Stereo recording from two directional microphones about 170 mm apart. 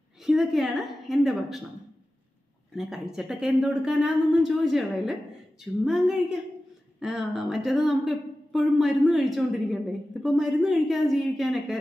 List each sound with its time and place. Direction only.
0.2 s a woman's voice: centre (ahead or behind)
2.7 s speech: centre (ahead or behind)